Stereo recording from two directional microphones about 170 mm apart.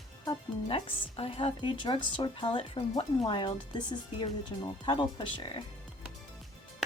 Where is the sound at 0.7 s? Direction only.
35° left (ahead or behind).